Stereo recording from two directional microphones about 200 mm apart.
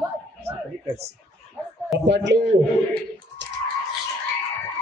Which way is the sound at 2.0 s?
60° right (ahead or behind).